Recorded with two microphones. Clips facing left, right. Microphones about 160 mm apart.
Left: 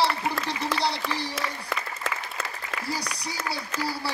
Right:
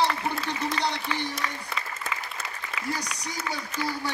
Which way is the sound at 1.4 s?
90° left.